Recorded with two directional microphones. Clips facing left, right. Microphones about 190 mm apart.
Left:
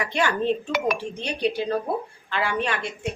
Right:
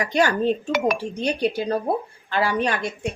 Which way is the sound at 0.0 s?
40° right (ahead or behind).